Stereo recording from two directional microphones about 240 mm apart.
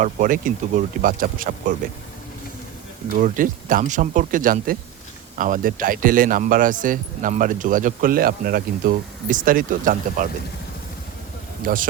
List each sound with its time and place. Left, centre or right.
0.0 s a man's voice: right
3.2 s a man's voice: right
11.6 s a man's voice: right